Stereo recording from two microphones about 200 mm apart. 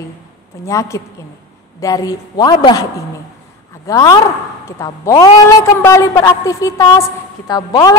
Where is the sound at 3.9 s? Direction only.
15° left (ahead or behind).